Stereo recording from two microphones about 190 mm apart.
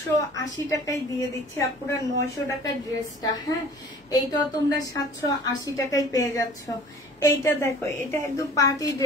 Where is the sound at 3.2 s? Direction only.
20° left (ahead or behind).